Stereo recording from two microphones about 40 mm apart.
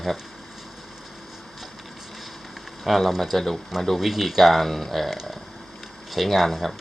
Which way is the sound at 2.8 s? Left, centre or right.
Centre.